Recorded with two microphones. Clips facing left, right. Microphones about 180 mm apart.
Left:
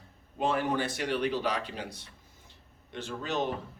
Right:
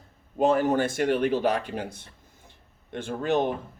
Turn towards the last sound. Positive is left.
turn(degrees=-55)  # may be behind; listen again after turning